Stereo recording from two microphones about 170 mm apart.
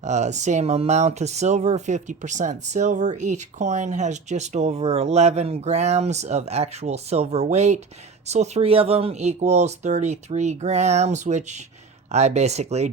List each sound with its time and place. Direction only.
0.0 s speech: 45° right (ahead or behind)